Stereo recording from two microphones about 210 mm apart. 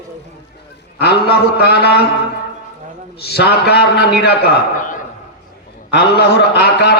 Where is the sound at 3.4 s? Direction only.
50° left (ahead or behind).